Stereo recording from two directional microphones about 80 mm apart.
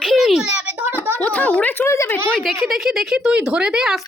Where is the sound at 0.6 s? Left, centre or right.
Right.